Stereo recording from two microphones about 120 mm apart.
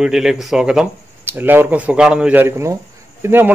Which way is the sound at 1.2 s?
15° right (ahead or behind).